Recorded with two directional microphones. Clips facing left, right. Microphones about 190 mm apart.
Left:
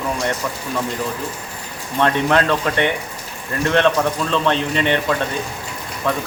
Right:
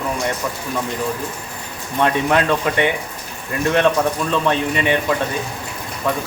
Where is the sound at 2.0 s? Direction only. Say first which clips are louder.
Even; 10° right (ahead or behind).